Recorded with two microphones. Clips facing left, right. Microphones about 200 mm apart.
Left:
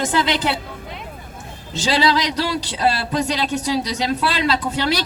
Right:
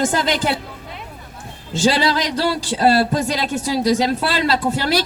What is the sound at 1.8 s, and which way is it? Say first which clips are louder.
Speech: right 1 dB; 50° right (ahead or behind).